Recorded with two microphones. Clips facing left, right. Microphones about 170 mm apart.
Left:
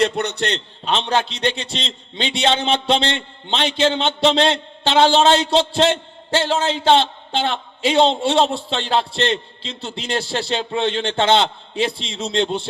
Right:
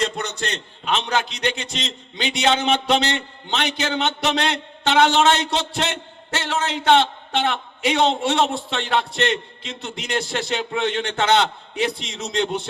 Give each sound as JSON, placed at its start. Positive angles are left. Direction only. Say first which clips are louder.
{"t": 0.0, "sound": "a man's voice", "louder": "left 6 dB", "side_deg": 65}
{"t": 0.9, "sound": "a man's voice", "louder": "left 3 dB", "side_deg": 30}